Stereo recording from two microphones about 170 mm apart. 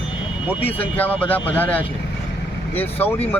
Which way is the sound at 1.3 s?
10° left (ahead or behind).